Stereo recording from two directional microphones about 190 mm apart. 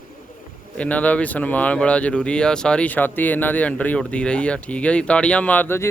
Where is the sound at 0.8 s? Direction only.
5° left (ahead or behind).